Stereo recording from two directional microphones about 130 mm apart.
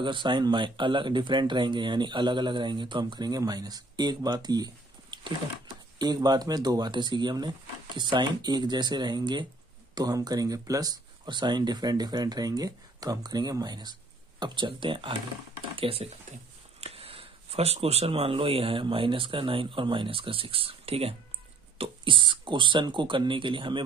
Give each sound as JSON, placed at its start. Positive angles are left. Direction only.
{"t": 0.0, "sound": "speech", "side_deg": -40}